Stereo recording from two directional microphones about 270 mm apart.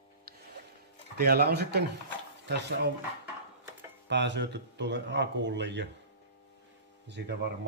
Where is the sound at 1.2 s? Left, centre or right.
Right.